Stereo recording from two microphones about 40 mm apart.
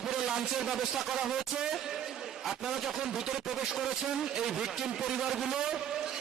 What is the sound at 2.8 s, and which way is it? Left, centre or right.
A man's voice, centre.